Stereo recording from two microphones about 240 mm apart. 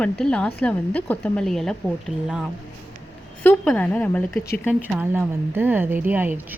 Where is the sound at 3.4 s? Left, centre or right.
Centre.